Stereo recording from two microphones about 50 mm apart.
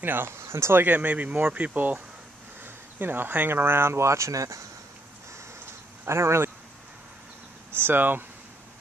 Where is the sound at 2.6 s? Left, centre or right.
Right.